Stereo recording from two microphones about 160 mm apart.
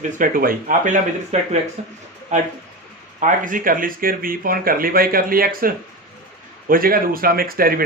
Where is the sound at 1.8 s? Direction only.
45° right (ahead or behind).